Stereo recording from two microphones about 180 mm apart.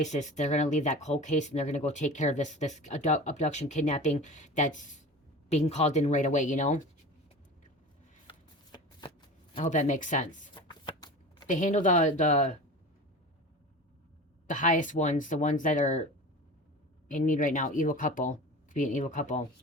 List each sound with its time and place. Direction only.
0.0 s speech: 40° left (ahead or behind)
8.3 s shuffling cards: 25° left (ahead or behind); by 10.5 s 45° left (ahead or behind)
10.5 s shuffling cards: 25° left (ahead or behind)
11.4 s speech: 45° left (ahead or behind)
14.4 s speech: 45° left (ahead or behind)
17.1 s speech: 45° left (ahead or behind)